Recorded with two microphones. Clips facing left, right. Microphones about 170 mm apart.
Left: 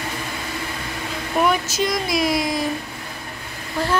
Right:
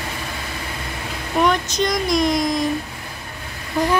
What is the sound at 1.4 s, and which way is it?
Speech, 5° left (ahead or behind).